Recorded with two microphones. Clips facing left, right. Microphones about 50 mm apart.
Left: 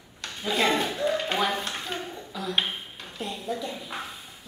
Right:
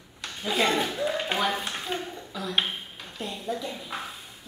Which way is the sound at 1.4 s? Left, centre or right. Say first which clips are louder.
Even; centre.